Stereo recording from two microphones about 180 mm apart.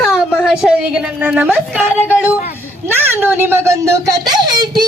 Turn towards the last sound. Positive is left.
turn(degrees=-20)  # may be behind; listen again after turning